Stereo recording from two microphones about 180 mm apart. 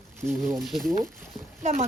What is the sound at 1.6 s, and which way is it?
Speech, 45° right (ahead or behind).